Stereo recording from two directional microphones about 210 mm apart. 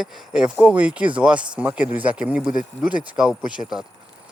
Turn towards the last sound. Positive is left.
turn(degrees=-5)  # may be behind; listen again after turning